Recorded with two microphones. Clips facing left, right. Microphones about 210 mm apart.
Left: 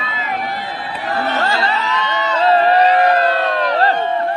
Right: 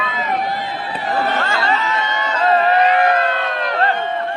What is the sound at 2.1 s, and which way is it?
Crowd, 50° right (ahead or behind).